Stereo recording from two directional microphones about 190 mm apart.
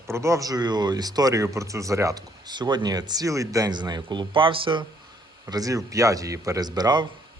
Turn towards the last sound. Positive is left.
turn(degrees=-20)  # may be behind; listen again after turning